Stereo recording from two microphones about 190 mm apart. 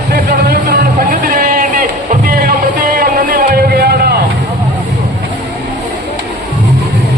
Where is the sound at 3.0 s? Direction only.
50° right (ahead or behind).